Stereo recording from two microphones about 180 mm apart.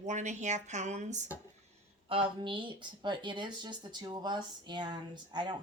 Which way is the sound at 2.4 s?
25° right (ahead or behind).